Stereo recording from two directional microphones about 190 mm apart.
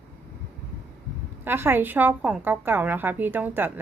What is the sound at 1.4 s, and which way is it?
A woman's voice, 10° right (ahead or behind).